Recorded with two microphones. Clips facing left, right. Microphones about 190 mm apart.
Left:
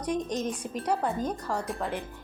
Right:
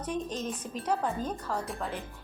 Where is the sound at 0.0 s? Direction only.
15° left (ahead or behind).